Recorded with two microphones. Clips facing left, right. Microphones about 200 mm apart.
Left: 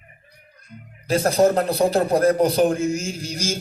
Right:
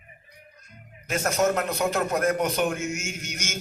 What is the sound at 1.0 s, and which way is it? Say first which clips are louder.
A man's voice: left 7 dB; 35° left (ahead or behind).